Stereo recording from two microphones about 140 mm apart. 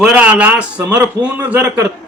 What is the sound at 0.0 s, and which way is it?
A man's voice, 5° right (ahead or behind).